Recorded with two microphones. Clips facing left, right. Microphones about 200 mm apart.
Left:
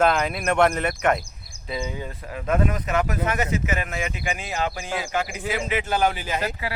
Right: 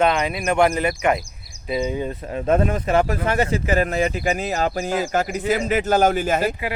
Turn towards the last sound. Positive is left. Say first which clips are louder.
# right 4 dB
turn(degrees=-15)  # may be behind; listen again after turning